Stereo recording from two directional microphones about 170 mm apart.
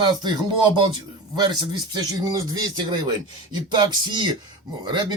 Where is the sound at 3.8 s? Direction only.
25° right (ahead or behind).